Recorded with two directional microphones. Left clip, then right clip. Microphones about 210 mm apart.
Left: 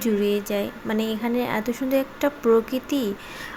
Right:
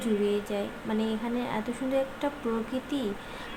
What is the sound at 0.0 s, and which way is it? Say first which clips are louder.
A woman's voice: left 5 dB; 25° left (ahead or behind).